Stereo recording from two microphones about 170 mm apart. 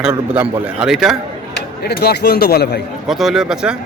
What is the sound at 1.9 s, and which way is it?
Speech, 75° left (ahead or behind).